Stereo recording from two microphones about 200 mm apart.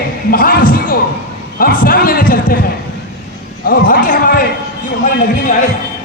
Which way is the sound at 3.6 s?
45° left (ahead or behind).